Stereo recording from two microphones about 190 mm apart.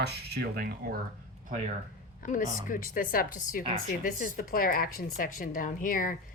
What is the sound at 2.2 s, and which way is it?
A woman's voice, 45° left (ahead or behind).